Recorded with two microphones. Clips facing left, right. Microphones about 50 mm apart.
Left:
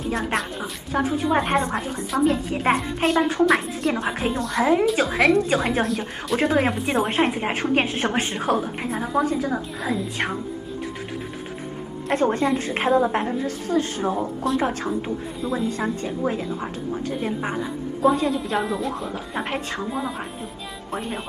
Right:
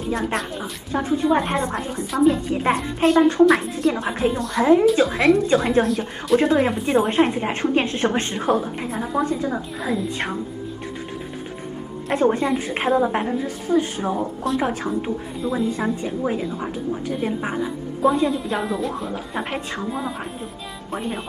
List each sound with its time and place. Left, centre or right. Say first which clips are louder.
0.1 s a woman's voice: right 2 dB; centre
8.4 s a woman's voice: right 2 dB; centre
12.1 s a woman's voice: right 1 dB; centre
13.7 s a woman's voice: right 4 dB; centre
14.0 s a woman's voice: even; centre